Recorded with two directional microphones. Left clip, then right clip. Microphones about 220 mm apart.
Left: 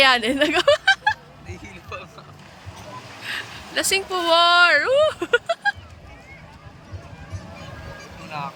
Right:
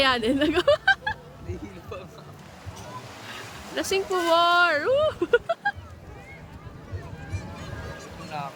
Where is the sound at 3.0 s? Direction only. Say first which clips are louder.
Left 11 dB; 50° right (ahead or behind).